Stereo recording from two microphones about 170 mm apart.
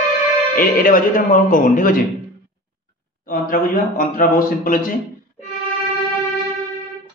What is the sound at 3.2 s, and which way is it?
A man's voice, 55° left (ahead or behind).